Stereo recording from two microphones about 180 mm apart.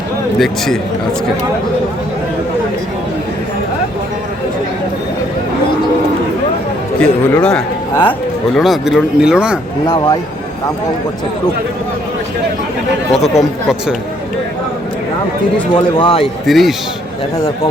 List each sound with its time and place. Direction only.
0.3 s speech: centre (ahead or behind)
7.0 s a man's voice: 5° left (ahead or behind)
9.8 s speech: 20° left (ahead or behind)
13.1 s speech: centre (ahead or behind)
16.0 s speech: 25° left (ahead or behind)
16.5 s speech: centre (ahead or behind)